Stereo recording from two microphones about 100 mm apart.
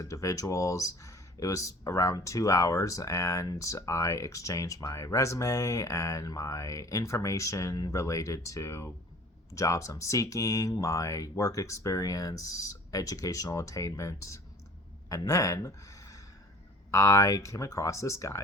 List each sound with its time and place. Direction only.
0.0 s speech: 35° left (ahead or behind)